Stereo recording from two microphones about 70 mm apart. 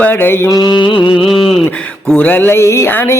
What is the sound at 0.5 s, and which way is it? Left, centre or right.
Mantra, left.